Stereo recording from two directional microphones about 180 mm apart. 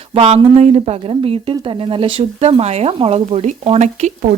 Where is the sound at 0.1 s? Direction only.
35° right (ahead or behind).